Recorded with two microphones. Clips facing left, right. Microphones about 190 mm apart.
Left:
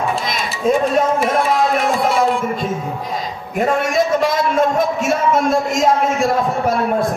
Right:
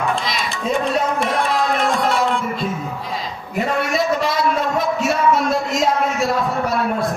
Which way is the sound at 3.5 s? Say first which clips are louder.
Left 3 dB; 50° left (ahead or behind).